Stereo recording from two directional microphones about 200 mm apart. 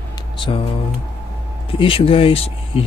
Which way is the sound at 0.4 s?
25° left (ahead or behind).